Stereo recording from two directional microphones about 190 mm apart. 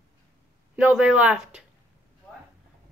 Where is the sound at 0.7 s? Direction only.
5° right (ahead or behind).